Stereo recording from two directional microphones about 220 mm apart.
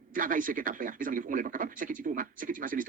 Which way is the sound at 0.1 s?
40° right (ahead or behind).